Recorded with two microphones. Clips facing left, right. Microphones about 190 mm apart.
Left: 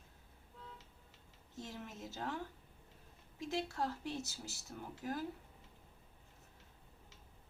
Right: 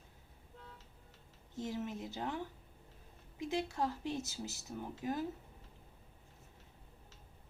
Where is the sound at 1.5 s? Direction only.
15° right (ahead or behind).